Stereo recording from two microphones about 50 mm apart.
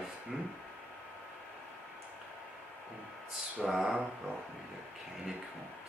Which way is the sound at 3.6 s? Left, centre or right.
Centre.